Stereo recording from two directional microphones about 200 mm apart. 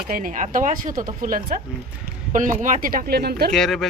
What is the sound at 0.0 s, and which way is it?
Speech, 45° right (ahead or behind).